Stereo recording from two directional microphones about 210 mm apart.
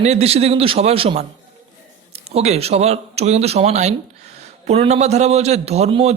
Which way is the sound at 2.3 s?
30° right (ahead or behind).